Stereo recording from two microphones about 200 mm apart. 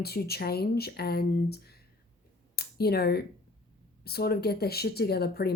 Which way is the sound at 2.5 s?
50° left (ahead or behind).